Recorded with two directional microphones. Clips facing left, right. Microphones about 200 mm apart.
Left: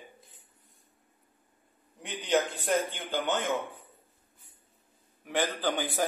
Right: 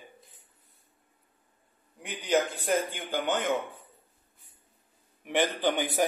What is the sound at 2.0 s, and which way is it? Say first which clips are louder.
A man's voice: right 1 dB; 10° right (ahead or behind).